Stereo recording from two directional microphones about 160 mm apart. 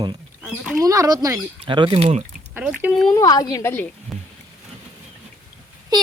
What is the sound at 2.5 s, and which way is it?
Speech, 10° right (ahead or behind).